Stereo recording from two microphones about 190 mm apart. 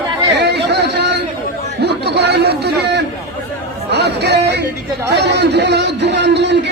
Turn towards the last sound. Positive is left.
turn(degrees=-65)  # may be behind; listen again after turning